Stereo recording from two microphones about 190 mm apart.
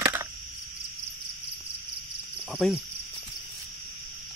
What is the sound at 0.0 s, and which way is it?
Cricket, 15° right (ahead or behind).